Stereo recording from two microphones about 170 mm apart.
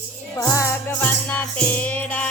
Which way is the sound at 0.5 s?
15° left (ahead or behind).